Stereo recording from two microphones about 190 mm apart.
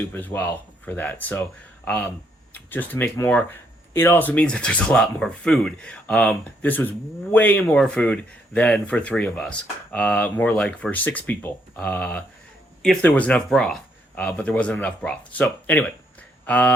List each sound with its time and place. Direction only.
0.1 s speech: 10° left (ahead or behind)